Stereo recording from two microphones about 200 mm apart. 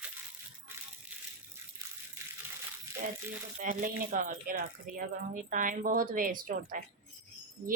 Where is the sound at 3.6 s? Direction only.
45° right (ahead or behind).